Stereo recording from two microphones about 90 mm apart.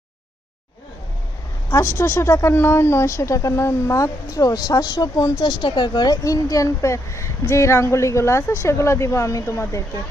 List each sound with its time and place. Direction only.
1.7 s speech: 30° left (ahead or behind)